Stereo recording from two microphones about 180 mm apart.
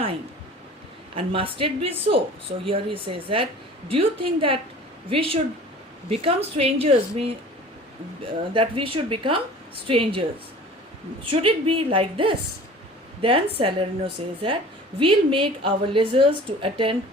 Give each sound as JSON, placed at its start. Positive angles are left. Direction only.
{"t": 1.1, "sound": "a woman's voice", "side_deg": -30}
{"t": 11.3, "sound": "a woman's voice", "side_deg": -30}